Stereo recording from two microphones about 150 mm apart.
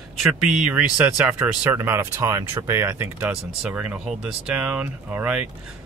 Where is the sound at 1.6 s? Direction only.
20° right (ahead or behind).